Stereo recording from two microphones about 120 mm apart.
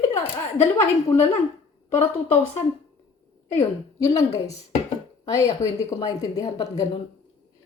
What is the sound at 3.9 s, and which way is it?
A woman's voice, 30° left (ahead or behind).